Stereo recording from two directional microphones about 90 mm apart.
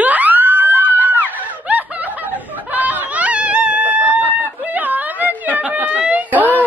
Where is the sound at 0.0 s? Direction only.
20° right (ahead or behind).